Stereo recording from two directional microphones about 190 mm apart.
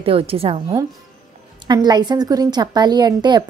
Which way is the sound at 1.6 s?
20° right (ahead or behind).